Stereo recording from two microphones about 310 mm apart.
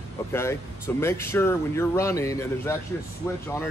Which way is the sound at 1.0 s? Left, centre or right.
Centre.